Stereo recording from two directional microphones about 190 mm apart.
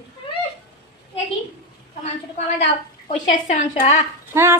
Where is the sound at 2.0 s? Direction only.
40° left (ahead or behind).